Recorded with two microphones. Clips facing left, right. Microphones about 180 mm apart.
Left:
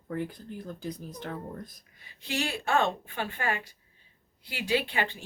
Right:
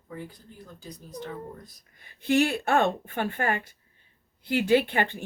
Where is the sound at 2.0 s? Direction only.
55° right (ahead or behind).